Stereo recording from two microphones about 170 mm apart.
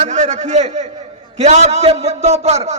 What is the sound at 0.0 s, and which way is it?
A man's voice, 45° right (ahead or behind).